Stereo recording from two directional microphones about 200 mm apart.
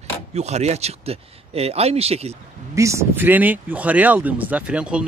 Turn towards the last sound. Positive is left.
turn(degrees=-5)  # may be behind; listen again after turning